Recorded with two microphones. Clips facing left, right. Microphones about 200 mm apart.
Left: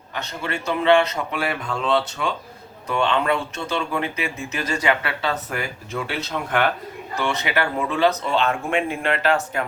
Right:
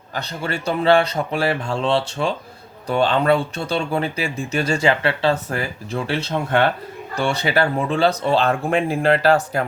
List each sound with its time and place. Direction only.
0.1 s speech: 35° right (ahead or behind)